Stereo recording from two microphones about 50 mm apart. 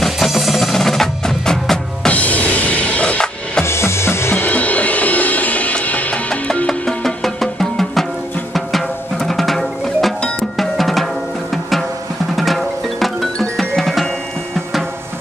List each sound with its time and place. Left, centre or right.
0.0 s music: centre
0.7 s percussion: centre
2.0 s music: left
3.6 s music: left
4.5 s music: left
6.7 s music: centre
10.6 s drum: centre
12.4 s music: centre